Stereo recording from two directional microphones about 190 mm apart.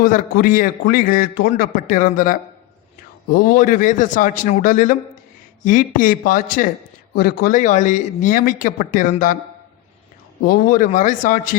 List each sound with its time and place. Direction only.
0.0 s a man's voice: 45° left (ahead or behind)
10.4 s a man's voice: 50° left (ahead or behind)